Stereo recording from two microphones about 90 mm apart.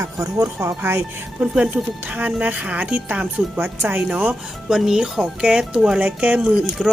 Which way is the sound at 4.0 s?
10° right (ahead or behind).